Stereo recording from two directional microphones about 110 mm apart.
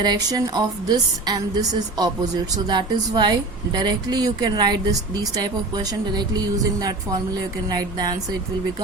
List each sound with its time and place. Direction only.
0.0 s a woman's voice: 40° right (ahead or behind)